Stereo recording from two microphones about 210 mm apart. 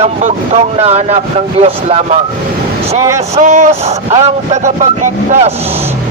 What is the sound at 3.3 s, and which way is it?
Speech, 35° right (ahead or behind).